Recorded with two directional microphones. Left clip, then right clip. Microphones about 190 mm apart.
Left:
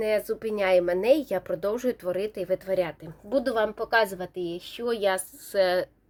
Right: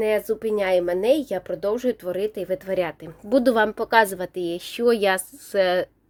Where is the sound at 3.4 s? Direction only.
65° right (ahead or behind).